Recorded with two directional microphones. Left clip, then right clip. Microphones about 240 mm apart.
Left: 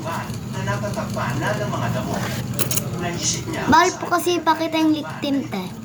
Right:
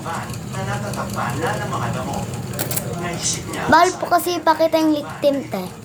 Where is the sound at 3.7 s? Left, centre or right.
Centre.